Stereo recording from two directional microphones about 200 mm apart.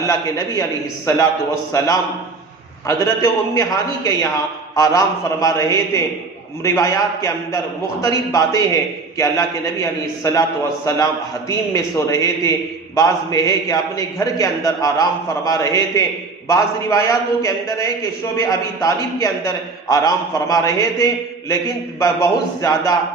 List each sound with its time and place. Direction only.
0.0 s a man's voice: 15° left (ahead or behind)
2.8 s a man's voice: 15° left (ahead or behind)